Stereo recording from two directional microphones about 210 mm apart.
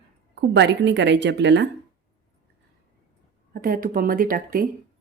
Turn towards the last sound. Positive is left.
turn(degrees=-45)  # may be behind; listen again after turning